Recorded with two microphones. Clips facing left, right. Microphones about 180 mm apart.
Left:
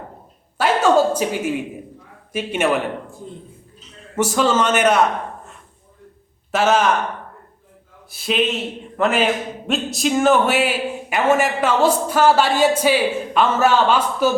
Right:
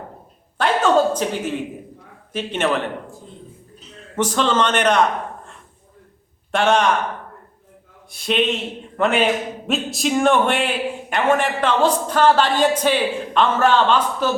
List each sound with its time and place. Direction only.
0.6 s a sound: 10° left (ahead or behind)
2.3 s a man's voice: 10° left (ahead or behind)
4.1 s a man's voice: 10° left (ahead or behind)
6.5 s a man's voice: 5° left (ahead or behind)
8.1 s a man's voice: centre (ahead or behind)